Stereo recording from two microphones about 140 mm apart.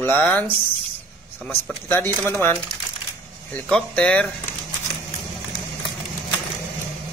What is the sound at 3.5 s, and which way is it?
Speech, 10° left (ahead or behind).